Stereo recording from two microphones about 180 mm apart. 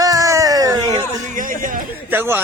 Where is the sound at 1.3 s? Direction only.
45° right (ahead or behind).